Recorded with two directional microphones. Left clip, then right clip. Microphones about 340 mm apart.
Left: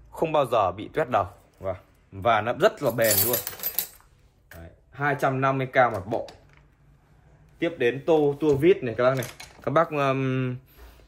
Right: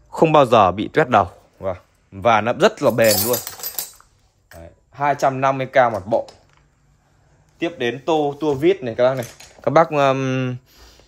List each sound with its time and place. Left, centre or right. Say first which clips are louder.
0.1 s speech: right 10 dB; right
4.9 s speech: right 7 dB; centre
7.5 s speech: right 2 dB; centre